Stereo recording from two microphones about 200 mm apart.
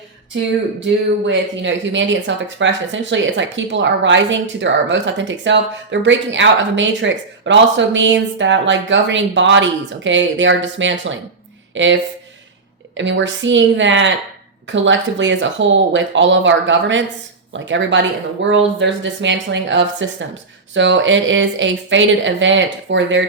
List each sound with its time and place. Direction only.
1.3 s speech: 65° right (ahead or behind)